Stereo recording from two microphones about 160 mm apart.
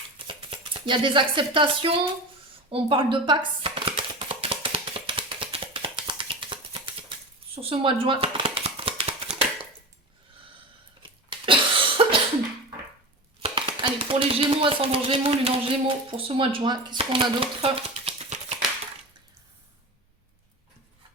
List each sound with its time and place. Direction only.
0.3 s speech: 30° right (ahead or behind)
2.6 s chopping: 30° right (ahead or behind)
7.5 s shuffling cards: 35° right (ahead or behind)
11.3 s cough: 30° right (ahead or behind)
13.4 s speech: 35° right (ahead or behind)